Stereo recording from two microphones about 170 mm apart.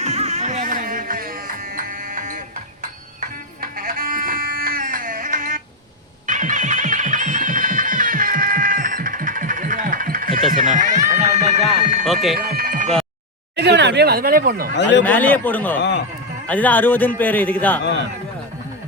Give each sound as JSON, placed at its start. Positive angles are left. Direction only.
{"t": 0.0, "sound": "music", "side_deg": -40}
{"t": 6.2, "sound": "a sound", "side_deg": -50}
{"t": 12.0, "sound": "speech", "side_deg": 0}
{"t": 12.4, "sound": "a sound", "side_deg": -60}
{"t": 13.6, "sound": "speech", "side_deg": -85}
{"t": 14.8, "sound": "speech", "side_deg": 90}
{"t": 15.0, "sound": "a man's voice", "side_deg": 10}
{"t": 15.8, "sound": "speech", "side_deg": 90}
{"t": 16.5, "sound": "a man's voice", "side_deg": 10}